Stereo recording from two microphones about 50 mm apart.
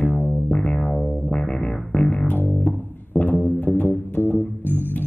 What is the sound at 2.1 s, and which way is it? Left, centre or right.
Music, left.